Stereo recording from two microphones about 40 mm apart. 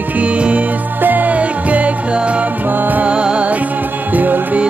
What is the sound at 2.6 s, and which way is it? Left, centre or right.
Music, right.